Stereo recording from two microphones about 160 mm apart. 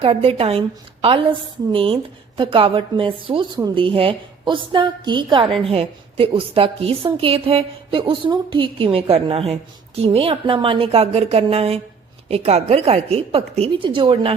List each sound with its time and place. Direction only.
0.0 s a woman's voice: 35° right (ahead or behind)